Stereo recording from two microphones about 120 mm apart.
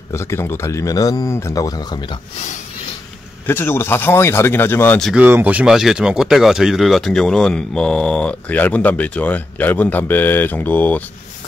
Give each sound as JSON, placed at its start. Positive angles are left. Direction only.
{"t": 0.1, "sound": "speech", "side_deg": 20}
{"t": 3.4, "sound": "speech", "side_deg": 20}
{"t": 5.1, "sound": "speech", "side_deg": -15}